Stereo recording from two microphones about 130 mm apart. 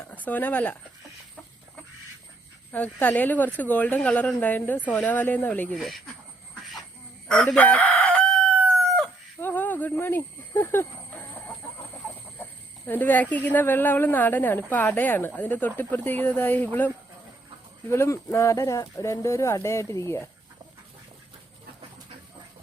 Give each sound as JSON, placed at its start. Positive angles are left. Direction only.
{"t": 0.1, "sound": "speech", "side_deg": 10}
{"t": 2.7, "sound": "speech", "side_deg": 10}
{"t": 7.3, "sound": "chicken", "side_deg": 5}
{"t": 9.4, "sound": "a sound", "side_deg": 15}
{"t": 10.0, "sound": "chicken", "side_deg": 15}
{"t": 12.8, "sound": "speech", "side_deg": 15}